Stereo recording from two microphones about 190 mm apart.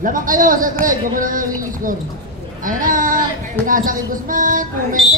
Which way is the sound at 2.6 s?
45° right (ahead or behind).